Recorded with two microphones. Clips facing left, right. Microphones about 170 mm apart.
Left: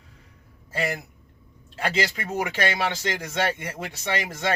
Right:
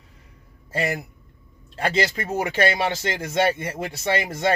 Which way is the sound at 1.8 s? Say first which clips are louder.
Right 3 dB; 40° right (ahead or behind).